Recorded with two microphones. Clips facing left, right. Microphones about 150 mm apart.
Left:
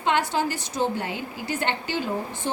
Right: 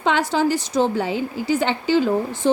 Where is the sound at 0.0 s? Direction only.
90° right.